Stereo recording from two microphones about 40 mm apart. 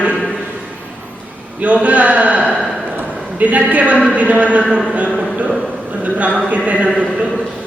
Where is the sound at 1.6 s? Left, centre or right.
Right.